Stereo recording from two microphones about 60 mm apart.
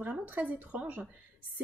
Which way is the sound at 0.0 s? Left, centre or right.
Right.